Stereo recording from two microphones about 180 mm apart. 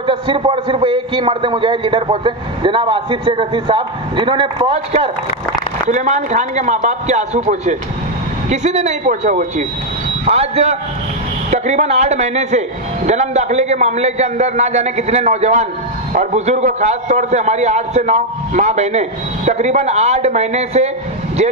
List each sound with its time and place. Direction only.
0.0 s a man's voice: 30° right (ahead or behind)
5.9 s a man's voice: 40° right (ahead or behind)